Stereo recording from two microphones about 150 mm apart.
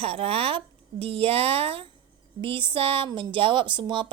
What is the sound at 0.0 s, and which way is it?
A woman's voice, 40° right (ahead or behind).